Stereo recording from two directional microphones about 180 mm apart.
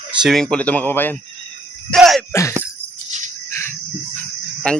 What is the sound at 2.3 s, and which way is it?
Speech, 15° left (ahead or behind).